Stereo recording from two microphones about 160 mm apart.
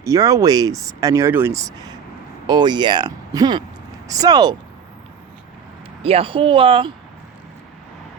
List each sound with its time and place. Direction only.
0.0 s speech: 20° right (ahead or behind)
6.0 s speech: 35° right (ahead or behind)